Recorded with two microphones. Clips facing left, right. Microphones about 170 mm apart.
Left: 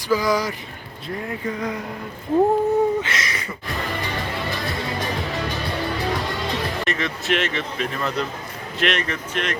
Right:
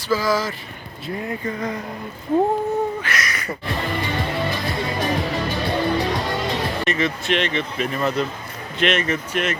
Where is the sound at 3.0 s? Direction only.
25° left (ahead or behind).